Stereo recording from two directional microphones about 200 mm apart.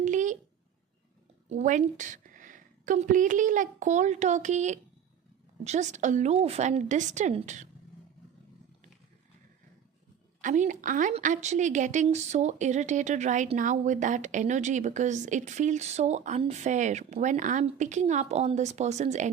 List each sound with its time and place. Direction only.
0.0 s a sound: 40° right (ahead or behind)
1.5 s a woman's voice: 35° right (ahead or behind)
10.4 s a woman's voice: 40° right (ahead or behind)